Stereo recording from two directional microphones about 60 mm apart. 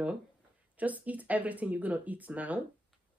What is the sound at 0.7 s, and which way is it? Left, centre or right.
Speech, right.